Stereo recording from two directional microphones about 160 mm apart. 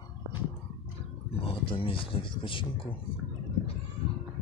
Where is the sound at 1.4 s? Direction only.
35° left (ahead or behind).